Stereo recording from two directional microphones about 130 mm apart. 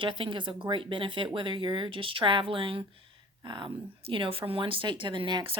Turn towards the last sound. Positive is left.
turn(degrees=-40)  # may be behind; listen again after turning